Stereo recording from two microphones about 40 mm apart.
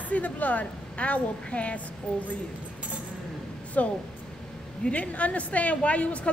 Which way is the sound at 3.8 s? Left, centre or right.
Left.